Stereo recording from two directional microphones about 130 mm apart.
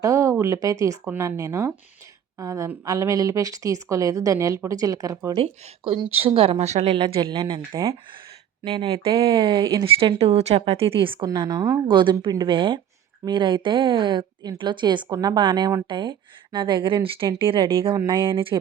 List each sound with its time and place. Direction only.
0.0 s a woman's voice: 25° right (ahead or behind)
5.4 s speech: 45° right (ahead or behind)
8.7 s speech: 45° right (ahead or behind)
9.8 s speech: 45° right (ahead or behind)
11.3 s a woman's voice: 30° right (ahead or behind)
11.9 s speech: 40° right (ahead or behind)